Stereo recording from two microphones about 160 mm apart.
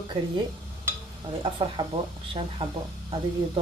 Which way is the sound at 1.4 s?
30° right (ahead or behind).